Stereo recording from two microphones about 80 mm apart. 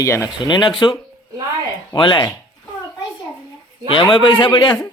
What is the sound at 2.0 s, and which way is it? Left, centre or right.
Speech, left.